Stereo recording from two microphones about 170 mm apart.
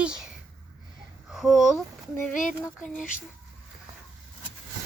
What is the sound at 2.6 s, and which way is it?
Speech, 5° left (ahead or behind).